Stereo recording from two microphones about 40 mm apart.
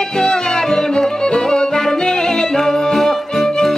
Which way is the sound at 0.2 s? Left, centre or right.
Centre.